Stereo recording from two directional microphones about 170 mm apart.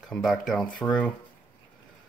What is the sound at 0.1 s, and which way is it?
Speech, centre (ahead or behind).